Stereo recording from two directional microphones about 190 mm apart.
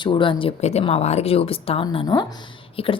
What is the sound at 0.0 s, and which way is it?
Speech, 25° left (ahead or behind).